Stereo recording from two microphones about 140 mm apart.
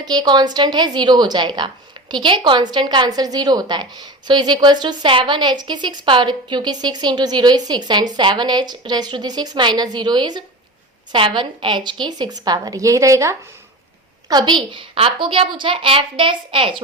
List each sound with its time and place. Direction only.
0.0 s a woman's voice: 30° right (ahead or behind)